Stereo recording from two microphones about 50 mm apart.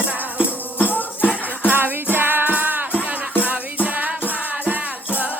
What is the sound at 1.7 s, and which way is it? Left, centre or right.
Music, right.